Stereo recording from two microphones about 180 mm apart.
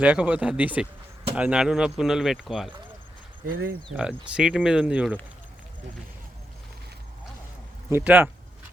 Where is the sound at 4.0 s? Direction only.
5° right (ahead or behind).